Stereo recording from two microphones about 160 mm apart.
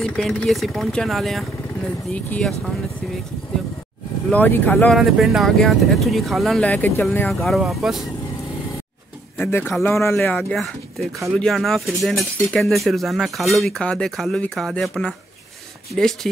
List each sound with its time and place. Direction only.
0.0 s speech: 5° left (ahead or behind)
4.3 s speech: 10° left (ahead or behind)
4.9 s speech: centre (ahead or behind)
9.4 s speech: 15° left (ahead or behind)